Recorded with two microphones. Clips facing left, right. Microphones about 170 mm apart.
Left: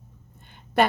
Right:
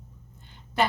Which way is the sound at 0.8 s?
55° left (ahead or behind).